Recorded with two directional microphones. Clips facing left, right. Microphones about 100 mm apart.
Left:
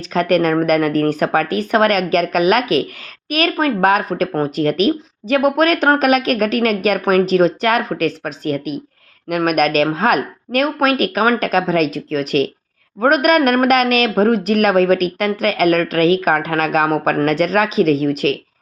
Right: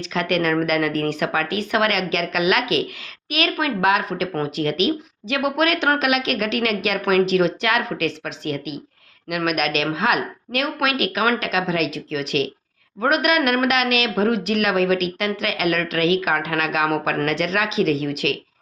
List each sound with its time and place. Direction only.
0.1 s speech: 40° left (ahead or behind)